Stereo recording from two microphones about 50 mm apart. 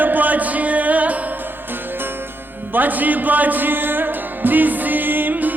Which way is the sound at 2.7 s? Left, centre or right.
Right.